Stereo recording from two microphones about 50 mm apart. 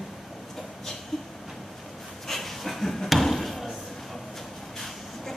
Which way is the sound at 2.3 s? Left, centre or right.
Centre.